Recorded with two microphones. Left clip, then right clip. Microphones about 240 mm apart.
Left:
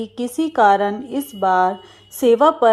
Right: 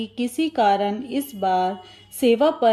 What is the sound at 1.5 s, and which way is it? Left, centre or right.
Speech, left.